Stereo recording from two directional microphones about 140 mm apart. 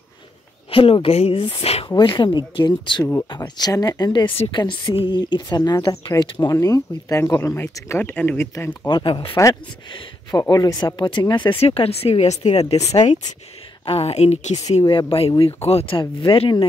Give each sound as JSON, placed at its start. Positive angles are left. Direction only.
{"t": 0.7, "sound": "speech", "side_deg": 40}
{"t": 2.0, "sound": "a woman's voice", "side_deg": 30}
{"t": 8.8, "sound": "a woman's voice", "side_deg": 35}
{"t": 9.3, "sound": "speech", "side_deg": 20}
{"t": 11.6, "sound": "speech", "side_deg": 45}
{"t": 14.7, "sound": "a woman's voice", "side_deg": 40}